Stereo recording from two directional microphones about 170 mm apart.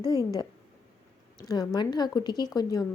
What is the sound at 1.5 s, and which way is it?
A woman's voice, 25° left (ahead or behind).